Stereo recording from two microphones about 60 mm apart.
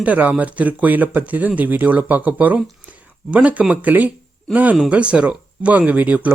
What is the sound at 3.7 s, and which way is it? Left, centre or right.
Speech, right.